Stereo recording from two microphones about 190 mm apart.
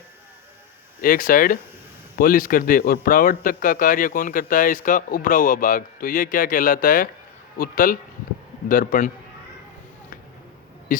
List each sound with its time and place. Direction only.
1.0 s a man's voice: 50° left (ahead or behind)